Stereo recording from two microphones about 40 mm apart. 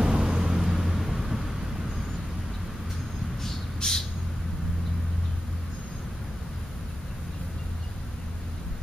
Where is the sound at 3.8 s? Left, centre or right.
Centre.